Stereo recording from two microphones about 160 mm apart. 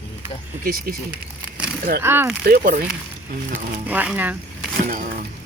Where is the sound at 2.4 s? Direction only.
65° right (ahead or behind).